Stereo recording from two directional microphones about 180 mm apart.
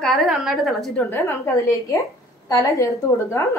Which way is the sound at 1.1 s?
15° left (ahead or behind).